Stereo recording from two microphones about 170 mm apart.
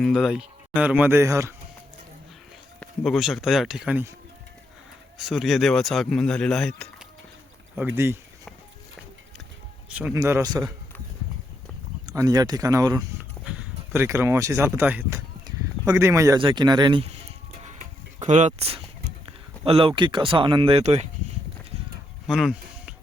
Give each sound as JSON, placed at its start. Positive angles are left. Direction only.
{"t": 0.0, "sound": "speech", "side_deg": 0}
{"t": 2.8, "sound": "speech", "side_deg": 0}
{"t": 5.1, "sound": "speech", "side_deg": 0}
{"t": 7.8, "sound": "speech", "side_deg": -15}
{"t": 10.2, "sound": "speech", "side_deg": -20}
{"t": 12.0, "sound": "speech", "side_deg": -20}
{"t": 13.4, "sound": "speech", "side_deg": -5}
{"t": 15.4, "sound": "a sound", "side_deg": -15}
{"t": 16.4, "sound": "speech", "side_deg": -30}
{"t": 17.6, "sound": "music", "side_deg": -45}
{"t": 19.6, "sound": "speech", "side_deg": -30}
{"t": 22.3, "sound": "a sound", "side_deg": 0}